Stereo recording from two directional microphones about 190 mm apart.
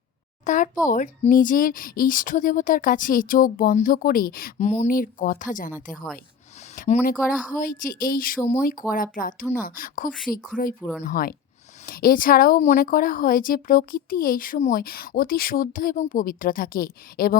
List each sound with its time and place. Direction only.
0.4 s a sound: 40° left (ahead or behind)
0.9 s a woman's voice: 45° left (ahead or behind)
6.7 s a woman's voice: 40° left (ahead or behind)